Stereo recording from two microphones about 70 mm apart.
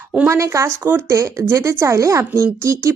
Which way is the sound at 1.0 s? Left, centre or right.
Right.